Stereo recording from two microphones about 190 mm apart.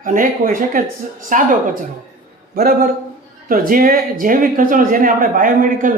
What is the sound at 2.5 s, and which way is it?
A man's voice, 55° right (ahead or behind).